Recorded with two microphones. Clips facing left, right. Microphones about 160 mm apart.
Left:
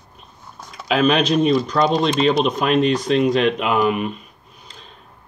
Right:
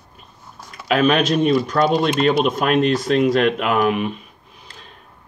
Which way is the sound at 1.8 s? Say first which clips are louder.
Even; 5° right (ahead or behind).